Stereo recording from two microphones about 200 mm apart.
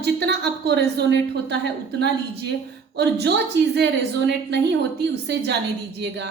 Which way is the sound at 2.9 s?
60° right (ahead or behind).